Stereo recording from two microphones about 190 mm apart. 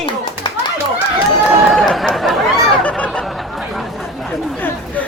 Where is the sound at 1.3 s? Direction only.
Centre (ahead or behind).